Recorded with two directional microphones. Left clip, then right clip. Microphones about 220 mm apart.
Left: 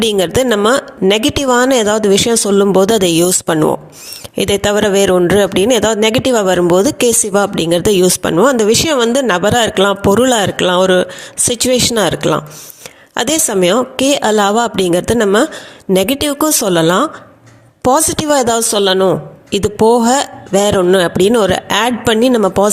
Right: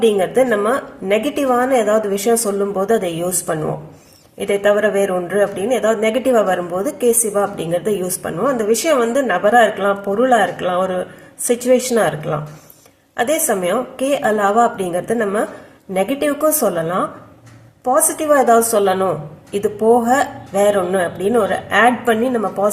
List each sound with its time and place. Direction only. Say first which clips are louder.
0.0 s a woman's voice: left 1 dB; 45° left (ahead or behind)